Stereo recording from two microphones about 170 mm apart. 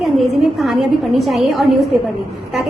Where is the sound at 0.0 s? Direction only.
Centre (ahead or behind).